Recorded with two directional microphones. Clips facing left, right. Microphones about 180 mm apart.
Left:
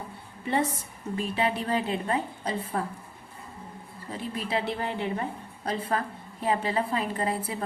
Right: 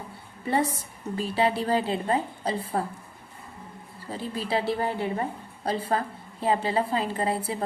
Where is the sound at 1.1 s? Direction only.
35° right (ahead or behind).